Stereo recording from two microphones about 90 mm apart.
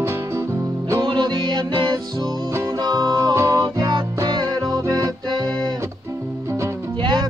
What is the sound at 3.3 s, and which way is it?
Music, 30° right (ahead or behind).